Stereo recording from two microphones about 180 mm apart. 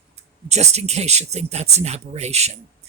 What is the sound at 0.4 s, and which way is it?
A woman's voice, 40° right (ahead or behind).